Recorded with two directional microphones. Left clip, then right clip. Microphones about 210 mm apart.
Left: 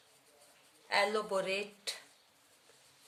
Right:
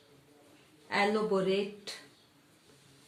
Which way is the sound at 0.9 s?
35° left (ahead or behind).